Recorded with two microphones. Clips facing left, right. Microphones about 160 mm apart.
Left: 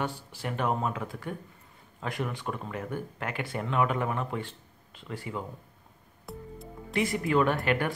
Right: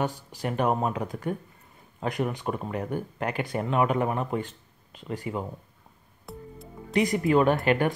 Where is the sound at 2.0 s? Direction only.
20° right (ahead or behind).